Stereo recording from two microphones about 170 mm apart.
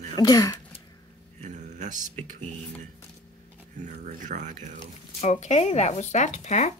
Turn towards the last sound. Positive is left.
turn(degrees=45)  # may be behind; listen again after turning